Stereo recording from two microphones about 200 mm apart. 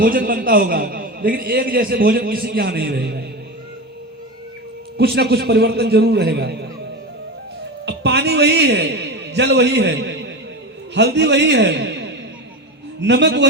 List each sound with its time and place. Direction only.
0.0 s a man's voice: 45° right (ahead or behind)
4.9 s a man's voice: 55° right (ahead or behind)
7.9 s a man's voice: 60° right (ahead or behind)